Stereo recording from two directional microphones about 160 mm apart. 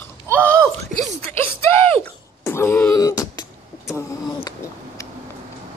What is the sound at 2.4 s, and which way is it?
Wail, 15° left (ahead or behind).